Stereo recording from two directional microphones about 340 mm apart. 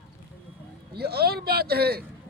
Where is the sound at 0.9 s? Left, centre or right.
Right.